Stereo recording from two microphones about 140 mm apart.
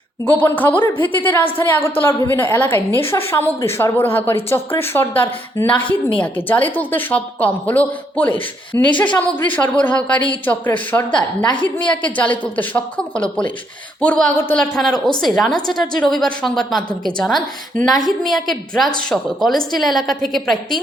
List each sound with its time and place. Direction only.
0.3 s a woman's voice: 10° left (ahead or behind)
11.4 s a woman's voice: 35° left (ahead or behind)
12.0 s a woman's voice: 10° left (ahead or behind)